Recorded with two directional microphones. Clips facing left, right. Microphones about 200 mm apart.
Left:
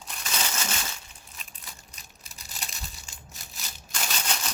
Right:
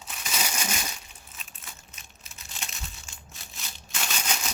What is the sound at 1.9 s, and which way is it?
Crumpling, 40° left (ahead or behind).